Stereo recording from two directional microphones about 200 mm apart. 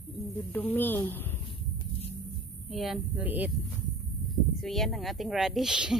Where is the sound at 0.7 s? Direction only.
10° left (ahead or behind).